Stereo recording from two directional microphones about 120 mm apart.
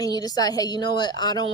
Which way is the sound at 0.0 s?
35° left (ahead or behind).